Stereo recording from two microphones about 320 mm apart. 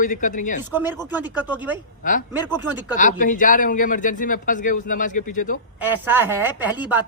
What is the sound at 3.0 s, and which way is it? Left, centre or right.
Speech, left.